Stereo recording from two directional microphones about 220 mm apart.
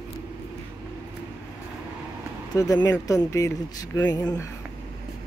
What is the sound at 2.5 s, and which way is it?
Speech, 15° left (ahead or behind).